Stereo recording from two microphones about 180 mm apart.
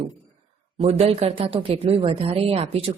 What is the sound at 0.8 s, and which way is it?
A woman's voice, 35° right (ahead or behind).